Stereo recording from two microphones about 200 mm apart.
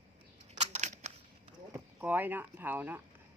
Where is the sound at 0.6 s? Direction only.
35° right (ahead or behind).